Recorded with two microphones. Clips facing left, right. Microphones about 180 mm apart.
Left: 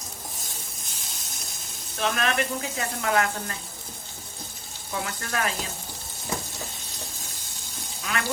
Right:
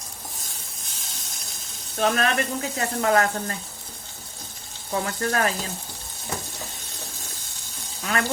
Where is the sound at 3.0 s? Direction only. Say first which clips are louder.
Right 4 dB; 40° right (ahead or behind).